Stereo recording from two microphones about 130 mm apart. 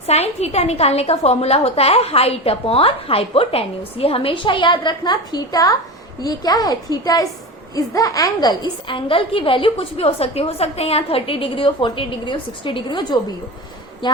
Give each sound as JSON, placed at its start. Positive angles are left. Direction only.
{"t": 0.1, "sound": "a woman's voice", "side_deg": 55}